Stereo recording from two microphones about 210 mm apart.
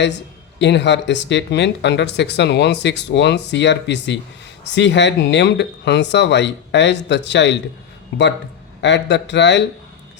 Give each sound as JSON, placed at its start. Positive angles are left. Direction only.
{"t": 0.6, "sound": "speech", "side_deg": 55}